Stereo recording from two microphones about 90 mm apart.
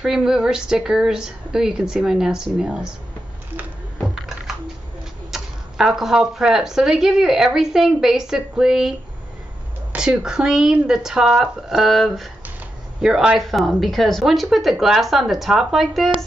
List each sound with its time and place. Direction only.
0.0 s a woman's voice: 5° right (ahead or behind)
5.3 s speech: 5° right (ahead or behind)
9.9 s a woman's voice: 5° right (ahead or behind)